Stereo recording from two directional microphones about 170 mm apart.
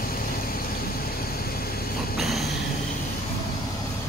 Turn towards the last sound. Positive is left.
turn(degrees=0)  # may be behind; listen again after turning